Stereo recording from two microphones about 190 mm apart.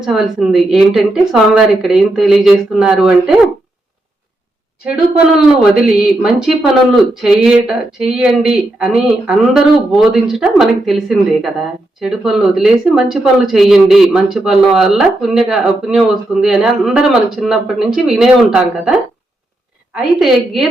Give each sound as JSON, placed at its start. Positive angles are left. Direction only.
{"t": 0.0, "sound": "speech", "side_deg": 0}
{"t": 6.2, "sound": "speech", "side_deg": 0}